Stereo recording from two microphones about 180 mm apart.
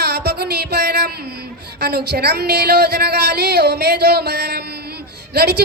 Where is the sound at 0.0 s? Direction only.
65° right (ahead or behind).